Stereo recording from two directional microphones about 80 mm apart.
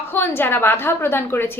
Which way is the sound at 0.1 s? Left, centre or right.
Left.